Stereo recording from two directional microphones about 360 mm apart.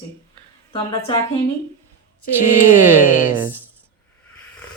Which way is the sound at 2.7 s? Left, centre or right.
Centre.